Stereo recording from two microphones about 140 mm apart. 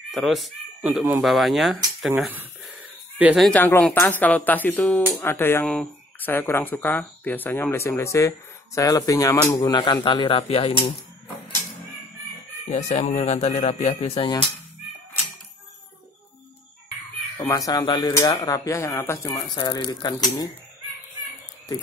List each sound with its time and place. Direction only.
0.1 s speech: centre (ahead or behind)
2.0 s a sound: centre (ahead or behind)
3.3 s speech: 5° left (ahead or behind)
3.9 s speech: 15° left (ahead or behind)
9.6 s speech: 35° left (ahead or behind)
12.6 s speech: 50° left (ahead or behind)
17.5 s speech: 25° left (ahead or behind)
19.5 s speech: 30° left (ahead or behind)